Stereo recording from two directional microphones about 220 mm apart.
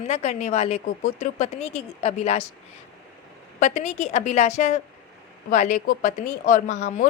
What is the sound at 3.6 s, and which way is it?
Speech, 30° left (ahead or behind).